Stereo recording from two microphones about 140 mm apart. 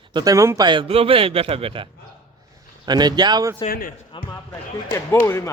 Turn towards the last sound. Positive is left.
turn(degrees=20)  # may be behind; listen again after turning